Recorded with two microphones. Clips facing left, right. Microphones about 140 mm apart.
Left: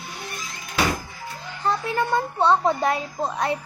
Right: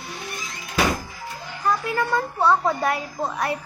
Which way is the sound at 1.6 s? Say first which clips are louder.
Even; 25° left (ahead or behind).